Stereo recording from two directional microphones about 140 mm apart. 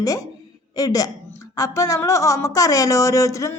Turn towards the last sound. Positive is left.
turn(degrees=20)  # may be behind; listen again after turning